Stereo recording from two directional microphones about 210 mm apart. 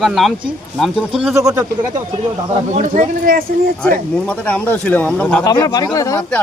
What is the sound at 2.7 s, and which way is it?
Speech, 35° right (ahead or behind).